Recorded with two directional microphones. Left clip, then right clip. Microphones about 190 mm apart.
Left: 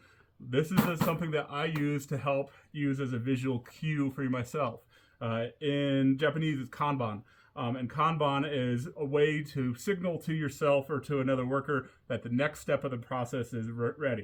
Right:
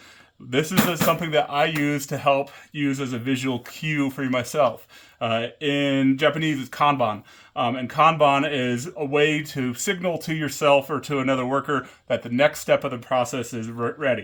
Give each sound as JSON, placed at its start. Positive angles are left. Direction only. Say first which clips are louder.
{"t": 1.2, "sound": "speech", "louder": "right 12 dB", "side_deg": -20}